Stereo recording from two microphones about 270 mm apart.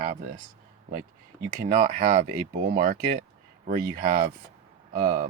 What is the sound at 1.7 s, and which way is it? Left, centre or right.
Speech, right.